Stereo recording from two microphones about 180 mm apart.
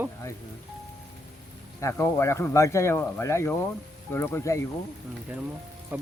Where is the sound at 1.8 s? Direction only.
15° left (ahead or behind).